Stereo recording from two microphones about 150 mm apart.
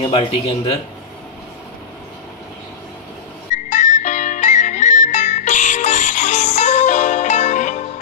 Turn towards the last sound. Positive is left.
turn(degrees=55)  # may be behind; listen again after turning